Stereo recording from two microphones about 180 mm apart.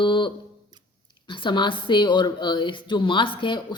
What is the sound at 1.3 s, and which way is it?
Speech, 25° left (ahead or behind).